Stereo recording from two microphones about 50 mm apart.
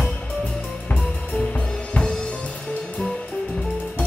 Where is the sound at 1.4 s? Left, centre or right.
Left.